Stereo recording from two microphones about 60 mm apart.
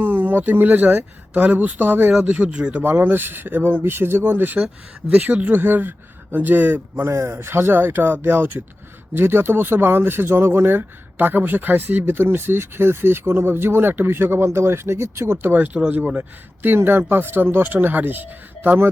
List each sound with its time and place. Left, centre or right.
0.0 s speech: right
2.1 s speech: right
2.8 s speech: right
7.1 s speech: right
16.6 s speech: right